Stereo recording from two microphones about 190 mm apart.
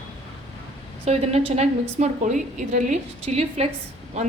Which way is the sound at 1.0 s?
35° right (ahead or behind).